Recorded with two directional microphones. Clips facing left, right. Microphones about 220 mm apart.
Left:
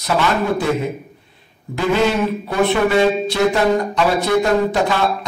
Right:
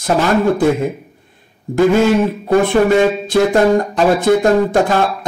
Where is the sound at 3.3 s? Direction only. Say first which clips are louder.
Right 4 dB; 50° right (ahead or behind).